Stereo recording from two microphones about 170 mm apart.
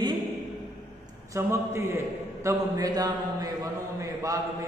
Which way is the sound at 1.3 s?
15° right (ahead or behind).